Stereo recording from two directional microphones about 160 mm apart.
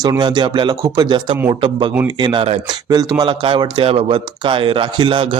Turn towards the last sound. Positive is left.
turn(degrees=-30)  # may be behind; listen again after turning